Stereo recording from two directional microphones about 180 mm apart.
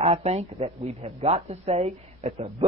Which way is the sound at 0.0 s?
35° right (ahead or behind).